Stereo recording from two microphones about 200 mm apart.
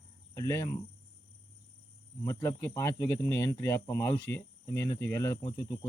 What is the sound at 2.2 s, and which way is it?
Speech, 15° left (ahead or behind).